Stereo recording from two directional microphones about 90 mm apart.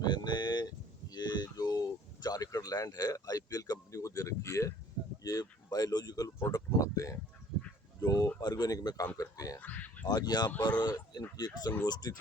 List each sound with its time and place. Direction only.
0.0 s speech: 55° left (ahead or behind)
1.1 s a sound: 50° left (ahead or behind)
2.2 s speech: 45° left (ahead or behind)
9.6 s speech: 15° left (ahead or behind)
10.1 s speech: 50° left (ahead or behind)